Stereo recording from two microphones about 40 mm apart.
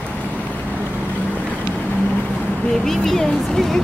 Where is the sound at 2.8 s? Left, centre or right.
Centre.